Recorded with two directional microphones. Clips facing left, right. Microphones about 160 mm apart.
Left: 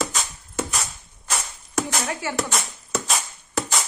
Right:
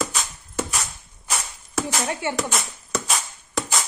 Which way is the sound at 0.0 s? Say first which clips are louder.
Even; centre (ahead or behind).